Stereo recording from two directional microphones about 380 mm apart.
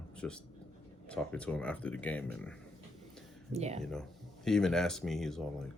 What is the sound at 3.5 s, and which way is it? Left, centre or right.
Speech, centre.